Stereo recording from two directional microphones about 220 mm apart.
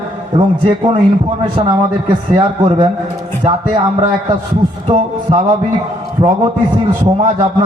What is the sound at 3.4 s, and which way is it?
A man's voice, 20° right (ahead or behind).